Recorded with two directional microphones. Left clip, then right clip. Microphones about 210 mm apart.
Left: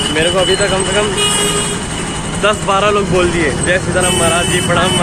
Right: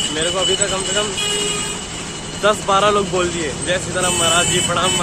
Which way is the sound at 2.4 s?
15° right (ahead or behind).